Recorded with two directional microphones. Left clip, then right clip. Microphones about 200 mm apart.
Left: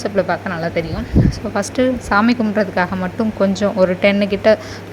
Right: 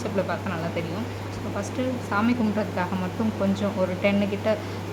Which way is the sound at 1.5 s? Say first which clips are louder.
Left 12 dB; 35° left (ahead or behind).